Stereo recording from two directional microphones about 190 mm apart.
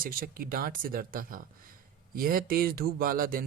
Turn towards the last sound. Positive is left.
turn(degrees=-50)  # may be behind; listen again after turning